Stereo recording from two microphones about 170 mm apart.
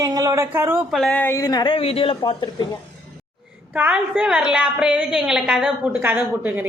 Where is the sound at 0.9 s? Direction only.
5° left (ahead or behind); by 2.6 s 30° left (ahead or behind).